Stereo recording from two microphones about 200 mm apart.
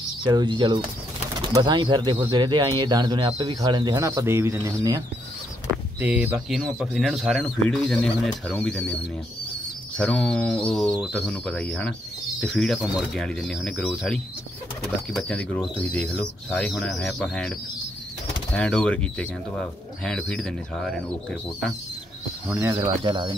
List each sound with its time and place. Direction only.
0.2 s speech: 20° right (ahead or behind); by 8.9 s 5° left (ahead or behind)
9.9 s speech: 5° left (ahead or behind)
22.5 s speech: 10° right (ahead or behind)
22.8 s speech: 25° right (ahead or behind)